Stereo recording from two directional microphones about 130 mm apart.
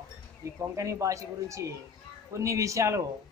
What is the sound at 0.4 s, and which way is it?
Speech, 25° right (ahead or behind).